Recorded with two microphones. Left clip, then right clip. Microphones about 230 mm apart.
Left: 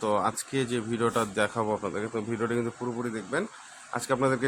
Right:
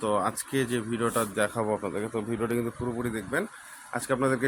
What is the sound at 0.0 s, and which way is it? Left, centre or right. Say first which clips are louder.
Speech: even; centre.